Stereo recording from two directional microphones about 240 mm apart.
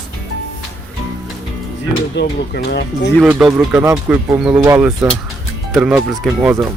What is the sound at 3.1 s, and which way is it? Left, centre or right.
Speech, centre.